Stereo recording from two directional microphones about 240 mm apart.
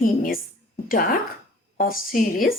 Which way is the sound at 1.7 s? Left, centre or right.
Left.